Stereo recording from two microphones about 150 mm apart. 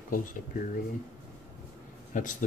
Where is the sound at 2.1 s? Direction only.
60° left (ahead or behind).